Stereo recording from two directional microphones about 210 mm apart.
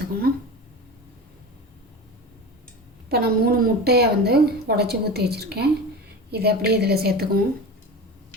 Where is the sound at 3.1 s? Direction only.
50° right (ahead or behind).